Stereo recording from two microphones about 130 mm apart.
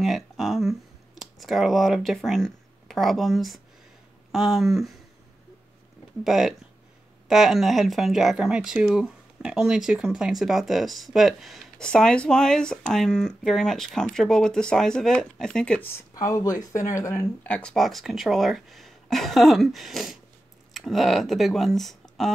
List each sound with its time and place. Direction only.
0.0 s speech: centre (ahead or behind)
6.2 s speech: centre (ahead or behind)
15.8 s speech: 25° left (ahead or behind)
17.5 s speech: 5° left (ahead or behind)